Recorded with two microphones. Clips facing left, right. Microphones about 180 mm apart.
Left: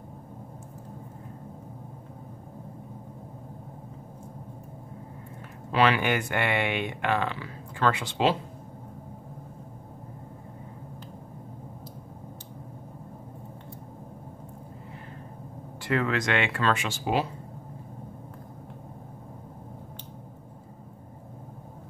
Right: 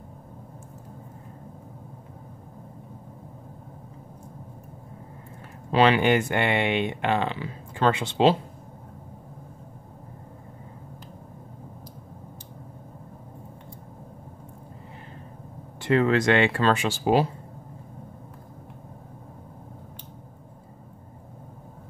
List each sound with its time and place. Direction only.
5.7 s speech: 25° right (ahead or behind)
15.8 s speech: 30° right (ahead or behind)